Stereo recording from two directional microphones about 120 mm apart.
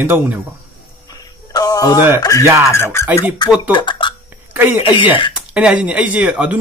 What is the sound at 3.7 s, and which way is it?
Speech, 40° left (ahead or behind).